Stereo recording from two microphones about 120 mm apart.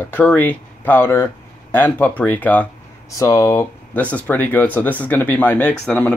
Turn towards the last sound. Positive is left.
turn(degrees=10)  # may be behind; listen again after turning